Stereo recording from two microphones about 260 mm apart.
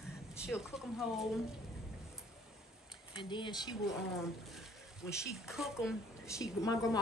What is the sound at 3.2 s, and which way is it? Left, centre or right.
Speech, centre.